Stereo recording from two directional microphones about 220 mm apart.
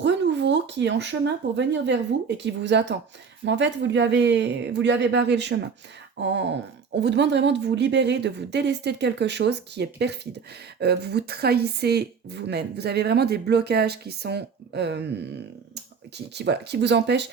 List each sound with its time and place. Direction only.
0.0 s speech: 55° right (ahead or behind)